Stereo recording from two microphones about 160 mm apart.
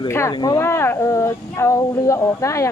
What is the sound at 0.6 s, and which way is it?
Speech, 15° left (ahead or behind).